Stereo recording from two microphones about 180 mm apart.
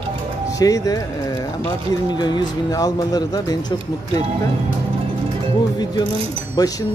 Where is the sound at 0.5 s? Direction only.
20° left (ahead or behind).